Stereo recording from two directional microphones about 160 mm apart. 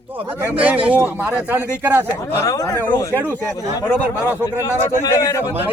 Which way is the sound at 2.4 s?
20° left (ahead or behind).